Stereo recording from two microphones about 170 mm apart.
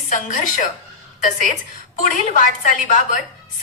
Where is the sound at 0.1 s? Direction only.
50° left (ahead or behind).